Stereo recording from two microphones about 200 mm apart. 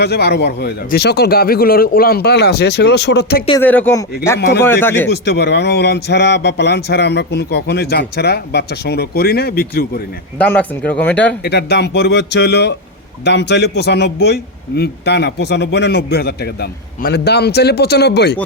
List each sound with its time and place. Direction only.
0.0 s speech: 55° left (ahead or behind)
3.6 s speech: 10° left (ahead or behind)
5.0 s a man's voice: 55° left (ahead or behind)
10.3 s speech: 10° left (ahead or behind)
11.4 s a man's voice: 55° left (ahead or behind)